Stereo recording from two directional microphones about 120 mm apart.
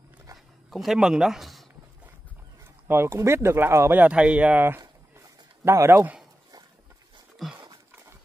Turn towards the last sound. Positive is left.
turn(degrees=0)  # may be behind; listen again after turning